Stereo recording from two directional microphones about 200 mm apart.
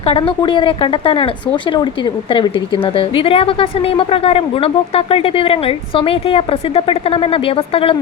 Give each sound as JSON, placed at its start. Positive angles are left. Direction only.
{"t": 0.0, "sound": "a woman's voice", "side_deg": 25}
{"t": 2.3, "sound": "a woman's voice", "side_deg": 25}